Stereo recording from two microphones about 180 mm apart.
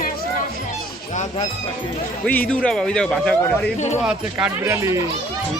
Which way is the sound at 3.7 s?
40° left (ahead or behind).